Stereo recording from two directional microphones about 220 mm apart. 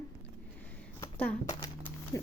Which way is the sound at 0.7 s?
5° left (ahead or behind).